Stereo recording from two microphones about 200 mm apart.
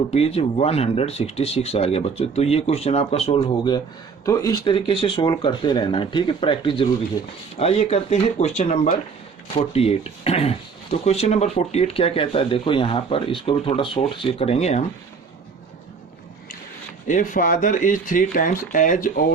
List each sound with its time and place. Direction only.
0.1 s speech: 30° left (ahead or behind)
17.1 s speech: 40° left (ahead or behind)